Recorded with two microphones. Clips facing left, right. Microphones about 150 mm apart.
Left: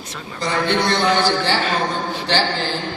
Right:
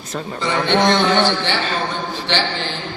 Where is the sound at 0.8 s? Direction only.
90° right.